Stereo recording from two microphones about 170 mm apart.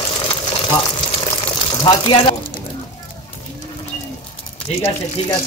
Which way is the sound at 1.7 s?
25° left (ahead or behind).